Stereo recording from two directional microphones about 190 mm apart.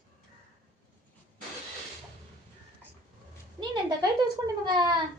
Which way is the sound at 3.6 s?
20° right (ahead or behind).